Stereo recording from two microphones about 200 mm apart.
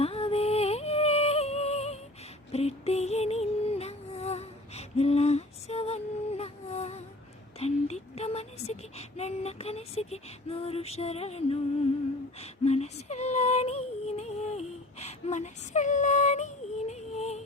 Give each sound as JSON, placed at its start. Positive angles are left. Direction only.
{"t": 0.0, "sound": "music", "side_deg": 30}
{"t": 7.6, "sound": "child singing", "side_deg": 30}
{"t": 12.4, "sound": "female singing", "side_deg": 30}